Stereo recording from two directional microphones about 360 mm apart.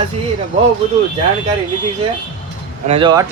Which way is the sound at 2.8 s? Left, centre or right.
Centre.